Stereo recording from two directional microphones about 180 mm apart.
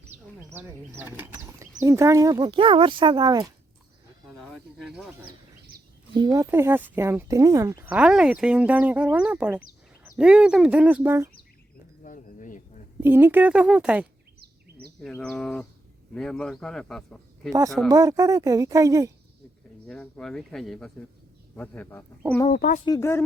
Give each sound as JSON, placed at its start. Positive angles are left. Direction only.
{"t": 0.5, "sound": "speech", "side_deg": -10}
{"t": 4.4, "sound": "speech", "side_deg": 0}
{"t": 6.1, "sound": "speech", "side_deg": -20}
{"t": 12.0, "sound": "a sound", "side_deg": 45}
{"t": 13.0, "sound": "speech", "side_deg": -10}
{"t": 15.1, "sound": "a man's voice", "side_deg": 5}
{"t": 17.8, "sound": "speech", "side_deg": -20}
{"t": 19.9, "sound": "a man's voice", "side_deg": 5}
{"t": 22.5, "sound": "speech", "side_deg": 50}
{"t": 22.9, "sound": "a man's voice", "side_deg": 15}